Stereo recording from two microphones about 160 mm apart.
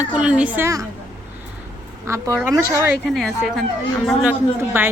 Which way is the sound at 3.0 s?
Centre (ahead or behind).